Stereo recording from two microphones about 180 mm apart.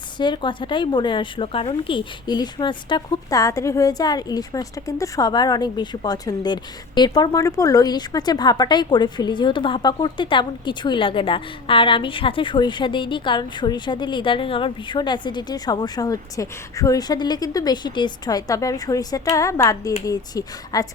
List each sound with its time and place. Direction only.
0.2 s a woman's voice: 25° left (ahead or behind)